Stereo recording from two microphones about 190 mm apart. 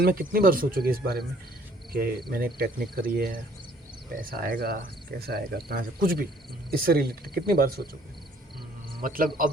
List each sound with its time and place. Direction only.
0.0 s speech: 50° right (ahead or behind)
9.0 s speech: 50° right (ahead or behind)